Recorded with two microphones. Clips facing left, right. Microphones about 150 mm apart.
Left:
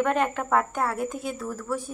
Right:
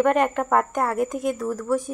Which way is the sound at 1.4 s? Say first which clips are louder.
Right 6 dB; 15° right (ahead or behind).